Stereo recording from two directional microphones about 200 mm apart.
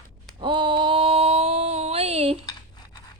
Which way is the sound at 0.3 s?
25° right (ahead or behind).